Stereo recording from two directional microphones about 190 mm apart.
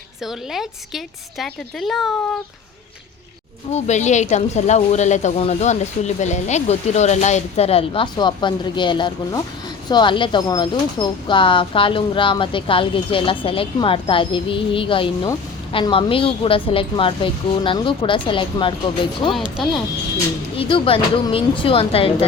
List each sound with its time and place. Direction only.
0.3 s a woman's voice: centre (ahead or behind)
3.7 s a woman's voice: 35° left (ahead or behind)
19.3 s a woman's voice: centre (ahead or behind)
20.6 s speech: 30° left (ahead or behind)